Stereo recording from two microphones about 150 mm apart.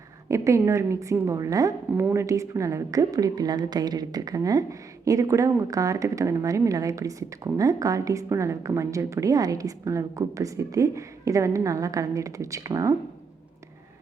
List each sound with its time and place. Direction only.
0.3 s a woman's voice: 20° right (ahead or behind)